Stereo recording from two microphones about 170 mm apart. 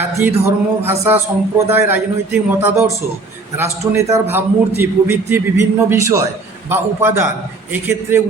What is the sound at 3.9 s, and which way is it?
A man's voice, 15° right (ahead or behind).